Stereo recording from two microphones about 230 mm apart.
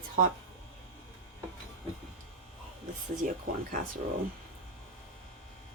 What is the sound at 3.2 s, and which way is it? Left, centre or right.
Speech, right.